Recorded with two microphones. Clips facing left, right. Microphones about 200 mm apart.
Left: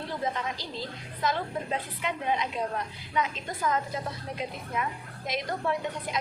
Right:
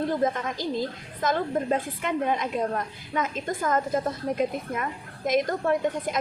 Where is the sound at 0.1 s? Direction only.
50° right (ahead or behind).